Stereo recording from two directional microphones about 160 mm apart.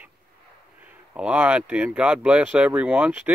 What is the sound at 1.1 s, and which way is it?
Speech, 5° right (ahead or behind).